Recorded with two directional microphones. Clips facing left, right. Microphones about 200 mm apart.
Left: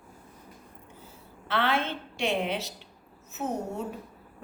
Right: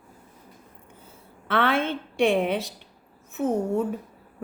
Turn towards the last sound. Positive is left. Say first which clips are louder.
# right 8 dB
turn(degrees=-55)  # may be behind; listen again after turning